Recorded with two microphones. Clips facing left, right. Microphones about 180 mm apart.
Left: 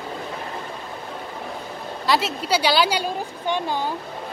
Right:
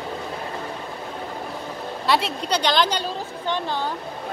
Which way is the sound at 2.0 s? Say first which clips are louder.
Even; centre (ahead or behind).